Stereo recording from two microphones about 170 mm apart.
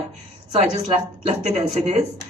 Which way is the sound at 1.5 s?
40° right (ahead or behind).